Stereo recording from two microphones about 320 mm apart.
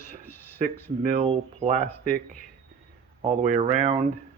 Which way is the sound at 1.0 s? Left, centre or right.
Centre.